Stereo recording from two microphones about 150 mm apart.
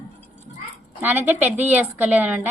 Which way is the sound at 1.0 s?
10° right (ahead or behind).